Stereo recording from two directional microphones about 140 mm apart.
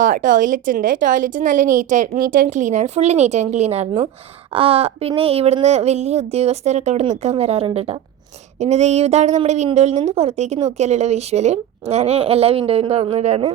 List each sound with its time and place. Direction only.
0.0 s speech: 70° right (ahead or behind); by 13.5 s 50° right (ahead or behind)